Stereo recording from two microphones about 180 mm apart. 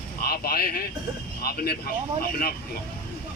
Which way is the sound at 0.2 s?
60° left (ahead or behind).